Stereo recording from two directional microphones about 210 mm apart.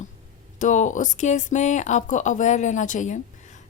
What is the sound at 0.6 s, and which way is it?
A woman's voice, 35° left (ahead or behind).